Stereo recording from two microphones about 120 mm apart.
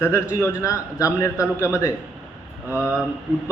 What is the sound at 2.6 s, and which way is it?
Speech, 10° right (ahead or behind).